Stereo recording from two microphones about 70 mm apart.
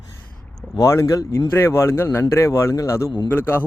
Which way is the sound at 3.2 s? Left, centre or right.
Left.